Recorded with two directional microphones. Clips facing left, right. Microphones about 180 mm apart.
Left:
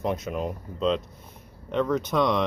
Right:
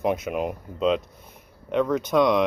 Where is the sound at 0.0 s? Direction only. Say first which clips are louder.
Right 3 dB; 10° right (ahead or behind).